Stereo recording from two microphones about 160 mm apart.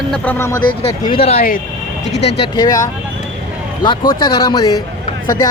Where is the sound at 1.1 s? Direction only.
40° left (ahead or behind).